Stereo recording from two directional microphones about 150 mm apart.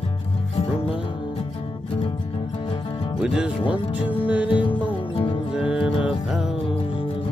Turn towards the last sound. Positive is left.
turn(degrees=-5)  # may be behind; listen again after turning